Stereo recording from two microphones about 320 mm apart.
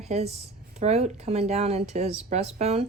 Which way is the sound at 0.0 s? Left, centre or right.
Centre.